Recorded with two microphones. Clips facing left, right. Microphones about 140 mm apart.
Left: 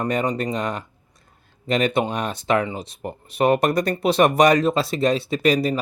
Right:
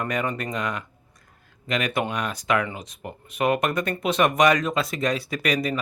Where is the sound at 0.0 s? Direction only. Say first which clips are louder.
Left 4 dB; 30° left (ahead or behind).